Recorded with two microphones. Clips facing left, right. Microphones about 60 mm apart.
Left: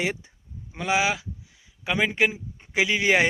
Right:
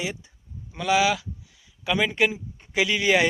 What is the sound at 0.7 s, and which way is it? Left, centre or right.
Speech, left.